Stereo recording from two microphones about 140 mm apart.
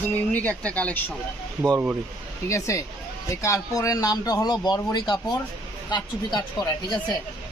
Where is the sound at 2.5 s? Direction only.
20° left (ahead or behind).